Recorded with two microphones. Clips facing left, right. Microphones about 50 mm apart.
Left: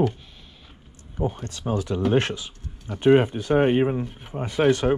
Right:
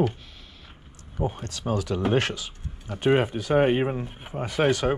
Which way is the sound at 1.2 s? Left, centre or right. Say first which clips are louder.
Left 2 dB; right.